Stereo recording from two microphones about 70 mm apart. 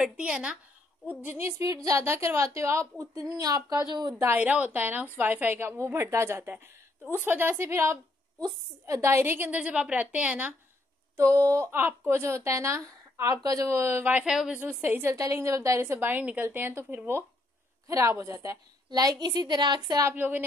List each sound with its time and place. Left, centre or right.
0.0 s a woman's voice: centre
1.9 s speech: right
4.4 s a woman's voice: centre
9.6 s a woman's voice: centre
11.1 s speech: right
11.7 s speech: right
13.4 s speech: right
14.2 s a woman's voice: centre
14.6 s a woman's voice: right
15.0 s a woman's voice: right
17.8 s a woman's voice: right
18.9 s a woman's voice: right
20.2 s a woman's voice: right